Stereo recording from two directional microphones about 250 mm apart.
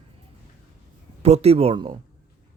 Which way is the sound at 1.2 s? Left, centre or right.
Right.